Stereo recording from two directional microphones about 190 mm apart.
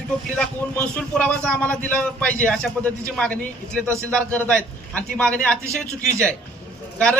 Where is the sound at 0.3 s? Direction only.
5° left (ahead or behind).